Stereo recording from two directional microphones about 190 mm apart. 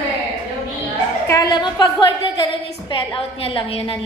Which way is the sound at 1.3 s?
20° left (ahead or behind).